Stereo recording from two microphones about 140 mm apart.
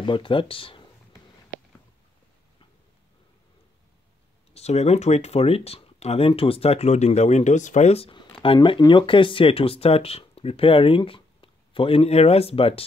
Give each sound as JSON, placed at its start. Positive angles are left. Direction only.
{"t": 0.0, "sound": "speech", "side_deg": 35}
{"t": 4.6, "sound": "speech", "side_deg": 50}